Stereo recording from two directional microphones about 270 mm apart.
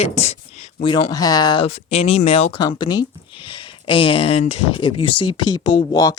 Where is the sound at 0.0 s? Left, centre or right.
Left.